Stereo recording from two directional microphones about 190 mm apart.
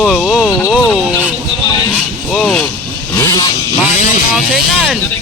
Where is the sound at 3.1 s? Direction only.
20° left (ahead or behind).